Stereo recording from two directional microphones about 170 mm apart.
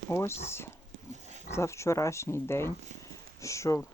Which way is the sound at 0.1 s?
15° left (ahead or behind).